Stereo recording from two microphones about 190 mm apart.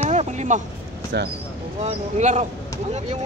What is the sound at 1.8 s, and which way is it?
Speech, 40° right (ahead or behind).